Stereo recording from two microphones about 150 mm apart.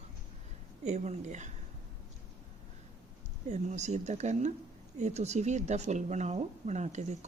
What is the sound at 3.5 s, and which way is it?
Speech, 50° right (ahead or behind).